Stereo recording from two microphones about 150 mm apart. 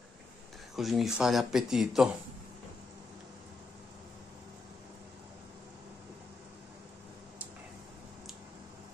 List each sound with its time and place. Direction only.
0.7 s speech: centre (ahead or behind)